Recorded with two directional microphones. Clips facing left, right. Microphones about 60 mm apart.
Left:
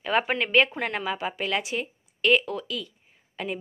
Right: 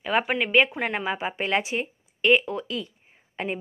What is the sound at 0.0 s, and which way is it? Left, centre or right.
A woman's voice, centre.